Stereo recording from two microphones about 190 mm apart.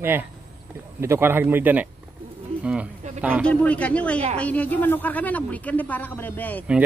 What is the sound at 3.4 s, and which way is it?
Speech, 5° left (ahead or behind).